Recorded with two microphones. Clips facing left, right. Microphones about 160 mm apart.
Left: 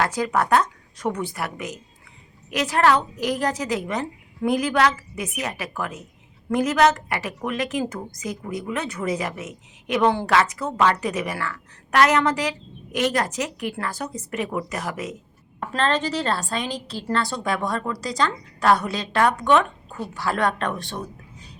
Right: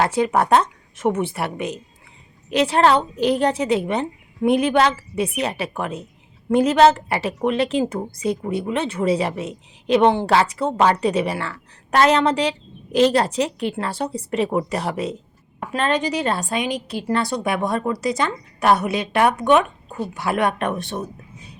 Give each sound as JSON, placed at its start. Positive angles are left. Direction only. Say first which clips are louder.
{"t": 0.0, "sound": "a woman's voice", "louder": "right 4 dB", "side_deg": -25}
{"t": 15.7, "sound": "a woman's voice", "louder": "right 2 dB", "side_deg": -15}